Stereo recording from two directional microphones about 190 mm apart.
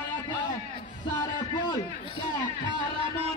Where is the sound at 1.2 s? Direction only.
20° left (ahead or behind).